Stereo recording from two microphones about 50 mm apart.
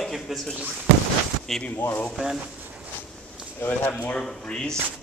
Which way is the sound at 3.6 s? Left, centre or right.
Left.